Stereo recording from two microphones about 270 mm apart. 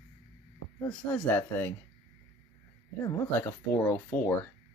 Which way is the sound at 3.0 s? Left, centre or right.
Centre.